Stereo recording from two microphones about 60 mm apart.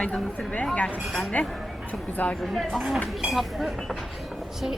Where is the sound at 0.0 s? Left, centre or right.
Centre.